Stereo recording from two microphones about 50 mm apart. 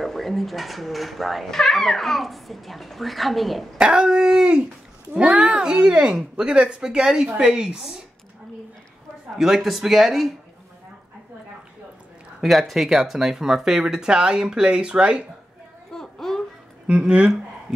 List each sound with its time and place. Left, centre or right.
0.0 s speech: centre
3.7 s speech: centre
9.4 s speech: centre
12.4 s speech: centre; by 15.2 s right
15.9 s a sound: centre
16.9 s speech: right
17.7 s speech: centre